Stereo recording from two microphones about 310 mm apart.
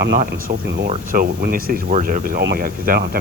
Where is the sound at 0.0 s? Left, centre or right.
Right.